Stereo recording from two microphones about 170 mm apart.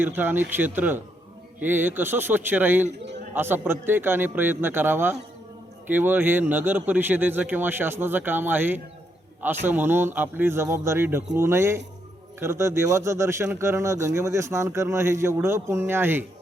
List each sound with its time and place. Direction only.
0.0 s speech: 10° right (ahead or behind)